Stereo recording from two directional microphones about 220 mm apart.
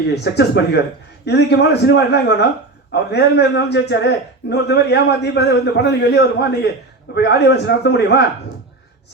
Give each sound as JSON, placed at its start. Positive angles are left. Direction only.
{"t": 0.1, "sound": "a man's voice", "side_deg": 50}